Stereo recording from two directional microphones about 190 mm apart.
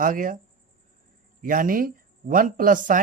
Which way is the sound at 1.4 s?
45° right (ahead or behind).